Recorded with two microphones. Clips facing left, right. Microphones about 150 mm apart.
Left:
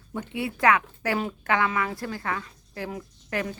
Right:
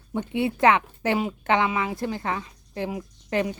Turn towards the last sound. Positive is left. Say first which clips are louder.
# right 5 dB
turn(degrees=-20)  # may be behind; listen again after turning